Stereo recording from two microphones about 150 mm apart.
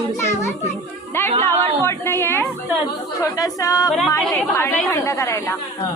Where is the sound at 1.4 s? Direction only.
15° left (ahead or behind).